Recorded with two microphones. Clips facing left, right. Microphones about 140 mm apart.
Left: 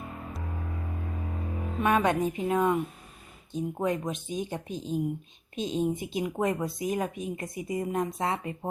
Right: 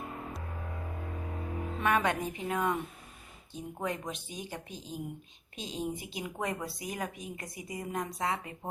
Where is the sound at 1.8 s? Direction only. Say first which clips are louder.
Left 5 dB; 20° left (ahead or behind).